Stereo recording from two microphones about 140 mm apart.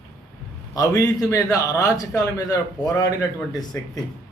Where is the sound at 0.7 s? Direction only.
25° left (ahead or behind).